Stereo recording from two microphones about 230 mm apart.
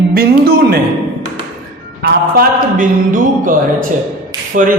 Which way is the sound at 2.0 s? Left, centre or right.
Right.